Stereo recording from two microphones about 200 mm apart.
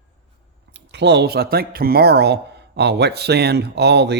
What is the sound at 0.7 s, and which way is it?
Speech, 60° right (ahead or behind).